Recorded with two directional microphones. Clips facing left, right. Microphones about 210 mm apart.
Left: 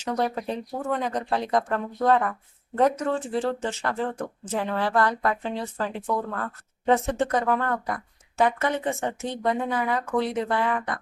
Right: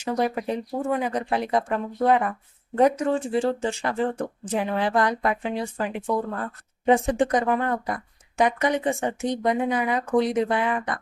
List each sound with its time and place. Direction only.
0.0 s speech: 10° right (ahead or behind)